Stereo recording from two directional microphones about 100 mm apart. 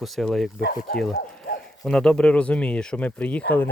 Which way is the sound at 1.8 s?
5° left (ahead or behind).